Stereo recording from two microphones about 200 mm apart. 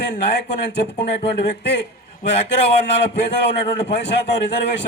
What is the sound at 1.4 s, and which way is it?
A man's voice, 60° left (ahead or behind).